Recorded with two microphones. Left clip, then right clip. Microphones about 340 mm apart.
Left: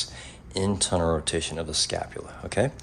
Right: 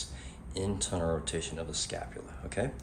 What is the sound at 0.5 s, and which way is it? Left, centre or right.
Speech, centre.